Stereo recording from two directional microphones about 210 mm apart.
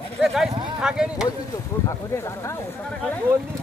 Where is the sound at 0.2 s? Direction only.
Centre (ahead or behind).